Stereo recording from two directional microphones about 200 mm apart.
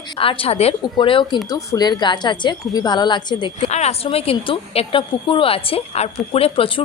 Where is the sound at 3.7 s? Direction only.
35° left (ahead or behind).